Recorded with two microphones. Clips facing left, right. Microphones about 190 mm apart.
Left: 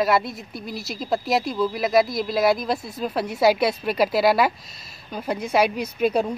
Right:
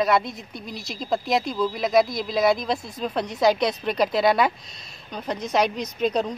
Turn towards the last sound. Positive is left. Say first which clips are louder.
# left 2 dB
turn(degrees=10)  # may be behind; listen again after turning